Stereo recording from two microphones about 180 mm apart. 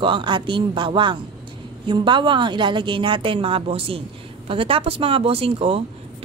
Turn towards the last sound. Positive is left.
turn(degrees=-30)  # may be behind; listen again after turning